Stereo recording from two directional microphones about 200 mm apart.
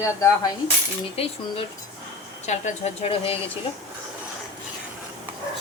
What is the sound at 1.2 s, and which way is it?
Speech, 30° left (ahead or behind).